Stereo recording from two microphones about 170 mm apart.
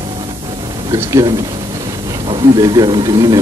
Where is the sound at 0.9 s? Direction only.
20° right (ahead or behind).